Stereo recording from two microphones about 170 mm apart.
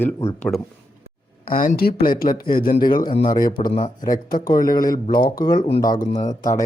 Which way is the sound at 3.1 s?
30° left (ahead or behind).